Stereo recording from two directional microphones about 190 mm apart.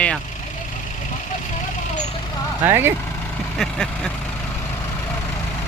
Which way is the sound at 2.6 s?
10° right (ahead or behind).